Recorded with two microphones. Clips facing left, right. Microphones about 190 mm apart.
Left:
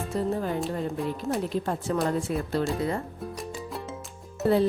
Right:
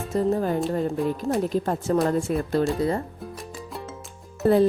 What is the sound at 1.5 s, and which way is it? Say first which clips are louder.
A woman's voice: right 4 dB; 40° right (ahead or behind).